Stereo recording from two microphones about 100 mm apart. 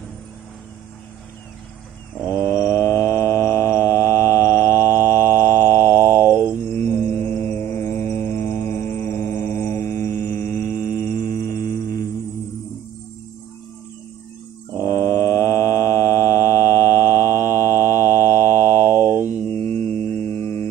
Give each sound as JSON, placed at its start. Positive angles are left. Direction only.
{"t": 2.6, "sound": "mantra", "side_deg": 30}
{"t": 6.2, "sound": "mantra", "side_deg": -25}
{"t": 6.7, "sound": "music", "side_deg": 25}
{"t": 8.2, "sound": "mantra", "side_deg": 25}
{"t": 15.1, "sound": "mantra", "side_deg": 30}
{"t": 18.9, "sound": "mantra", "side_deg": -20}
{"t": 19.5, "sound": "hum", "side_deg": 20}